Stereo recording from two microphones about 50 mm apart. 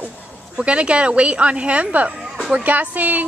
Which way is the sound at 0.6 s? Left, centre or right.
Right.